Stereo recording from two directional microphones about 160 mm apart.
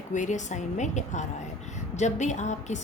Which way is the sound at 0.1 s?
50° left (ahead or behind).